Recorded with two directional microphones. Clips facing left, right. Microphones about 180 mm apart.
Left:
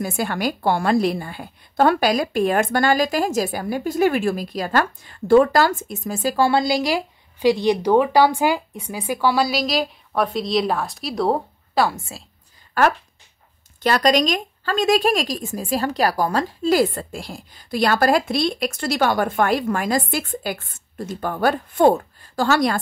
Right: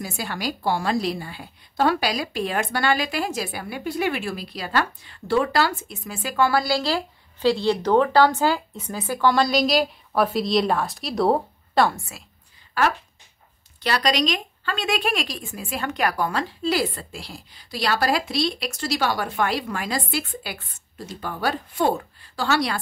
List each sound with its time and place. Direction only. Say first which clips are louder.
0.0 s a woman's voice: left 6 dB; 55° left (ahead or behind); by 11.9 s centre (ahead or behind)
12.8 s a woman's voice: left 4 dB; 50° left (ahead or behind)